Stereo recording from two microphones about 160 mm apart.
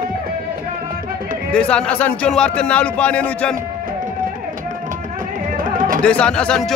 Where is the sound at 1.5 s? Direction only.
5° left (ahead or behind).